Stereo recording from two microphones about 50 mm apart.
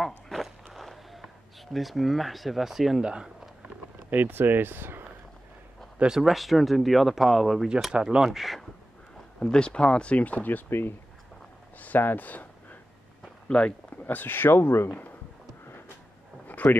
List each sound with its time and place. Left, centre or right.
0.3 s walk: centre
0.7 s a sound: centre
3.0 s speech: centre
4.1 s speech: right
6.1 s speech: centre
7.9 s speech: centre
9.4 s speech: centre; by 10.6 s left
10.7 s speech: left
13.5 s speech: left
14.0 s speech: left
16.4 s a sound: left